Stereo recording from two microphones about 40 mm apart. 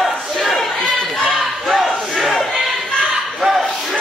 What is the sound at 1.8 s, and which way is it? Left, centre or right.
Battle cry, centre.